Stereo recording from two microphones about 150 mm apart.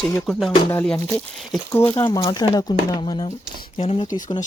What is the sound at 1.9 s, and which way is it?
Speech, 25° left (ahead or behind).